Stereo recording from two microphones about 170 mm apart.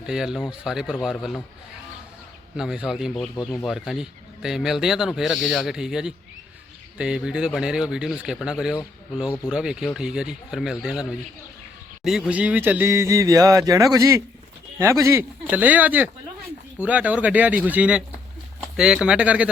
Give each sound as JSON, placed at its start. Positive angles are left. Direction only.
{"t": 0.0, "sound": "speech", "side_deg": -5}
{"t": 2.6, "sound": "speech", "side_deg": -5}
{"t": 3.3, "sound": "speech", "side_deg": 20}
{"t": 3.7, "sound": "speech", "side_deg": 0}